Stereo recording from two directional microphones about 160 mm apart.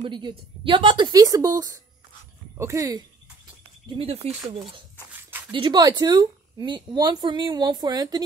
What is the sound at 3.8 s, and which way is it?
Speech, 35° right (ahead or behind).